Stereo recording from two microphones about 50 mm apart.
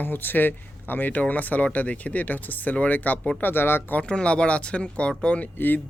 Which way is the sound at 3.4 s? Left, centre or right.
Left.